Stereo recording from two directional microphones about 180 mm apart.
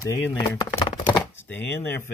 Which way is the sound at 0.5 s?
20° left (ahead or behind).